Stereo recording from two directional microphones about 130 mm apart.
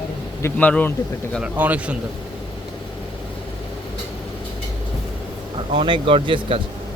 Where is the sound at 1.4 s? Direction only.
10° right (ahead or behind).